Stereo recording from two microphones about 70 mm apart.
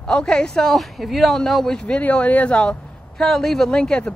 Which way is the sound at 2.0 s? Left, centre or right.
Left.